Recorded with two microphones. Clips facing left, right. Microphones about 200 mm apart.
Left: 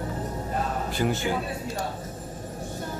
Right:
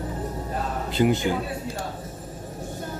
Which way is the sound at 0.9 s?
20° right (ahead or behind).